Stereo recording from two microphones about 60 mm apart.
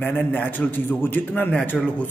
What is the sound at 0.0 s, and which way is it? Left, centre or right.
A man's voice, left.